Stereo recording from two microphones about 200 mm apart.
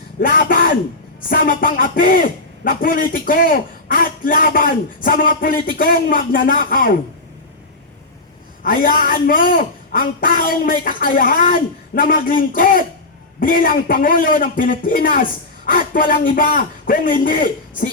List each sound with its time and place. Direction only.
0.2 s a sound: 45° left (ahead or behind)
1.3 s a man's voice: 45° left (ahead or behind)
8.6 s a man's voice: 45° left (ahead or behind)